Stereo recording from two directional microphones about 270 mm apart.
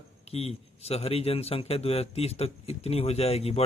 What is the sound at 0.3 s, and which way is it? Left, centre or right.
A man's voice, left.